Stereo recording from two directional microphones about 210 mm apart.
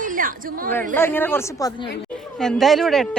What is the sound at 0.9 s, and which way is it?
Speech, 10° left (ahead or behind).